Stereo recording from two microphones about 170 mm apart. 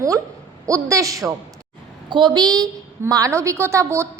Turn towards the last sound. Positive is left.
turn(degrees=-15)  # may be behind; listen again after turning